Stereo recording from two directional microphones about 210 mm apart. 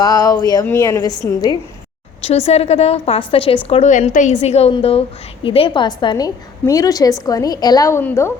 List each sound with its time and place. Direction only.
0.0 s speech: 15° left (ahead or behind)
2.2 s a woman's voice: 30° left (ahead or behind); by 8.3 s 10° left (ahead or behind)